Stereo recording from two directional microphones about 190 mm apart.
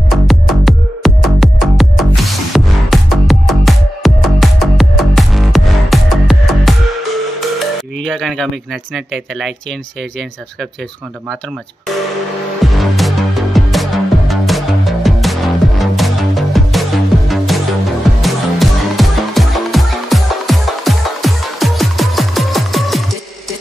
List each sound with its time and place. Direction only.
0.1 s music: centre (ahead or behind)
8.9 s speech: centre (ahead or behind)
12.7 s music: centre (ahead or behind)